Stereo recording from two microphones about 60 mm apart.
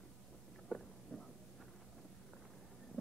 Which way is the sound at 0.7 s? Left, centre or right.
Centre.